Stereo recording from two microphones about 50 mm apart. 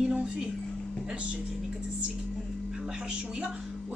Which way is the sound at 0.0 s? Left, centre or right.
Right.